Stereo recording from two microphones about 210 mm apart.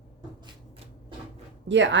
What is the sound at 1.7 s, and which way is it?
Speech, 60° right (ahead or behind).